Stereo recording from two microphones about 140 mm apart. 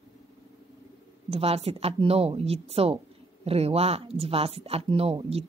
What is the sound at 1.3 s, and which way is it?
Speech, 45° right (ahead or behind).